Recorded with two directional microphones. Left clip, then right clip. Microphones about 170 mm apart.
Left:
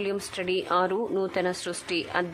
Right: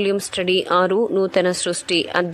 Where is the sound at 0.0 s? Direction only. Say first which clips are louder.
Right 9 dB; 30° right (ahead or behind).